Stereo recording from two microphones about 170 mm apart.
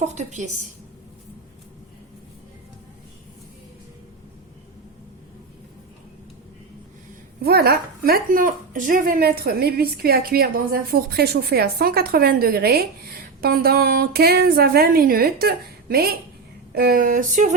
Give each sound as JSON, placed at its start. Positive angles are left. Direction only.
{"t": 0.0, "sound": "speech", "side_deg": -40}
{"t": 7.4, "sound": "a woman's voice", "side_deg": -65}